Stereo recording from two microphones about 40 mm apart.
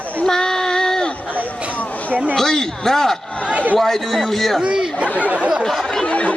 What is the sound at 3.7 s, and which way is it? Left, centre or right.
Speech, centre.